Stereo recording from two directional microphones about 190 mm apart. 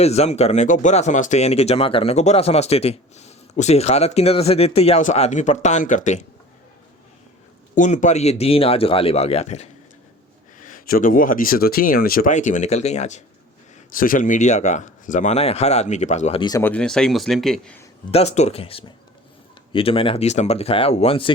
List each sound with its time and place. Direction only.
0.0 s speech: 35° left (ahead or behind)
7.8 s speech: 40° left (ahead or behind)
16.6 s speech: 10° left (ahead or behind)
18.1 s speech: 35° left (ahead or behind)